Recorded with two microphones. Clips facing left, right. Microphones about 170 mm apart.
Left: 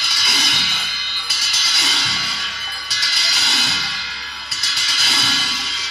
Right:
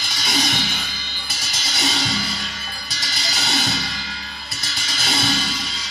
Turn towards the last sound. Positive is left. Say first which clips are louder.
# right 4 dB
turn(degrees=-45)  # may be behind; listen again after turning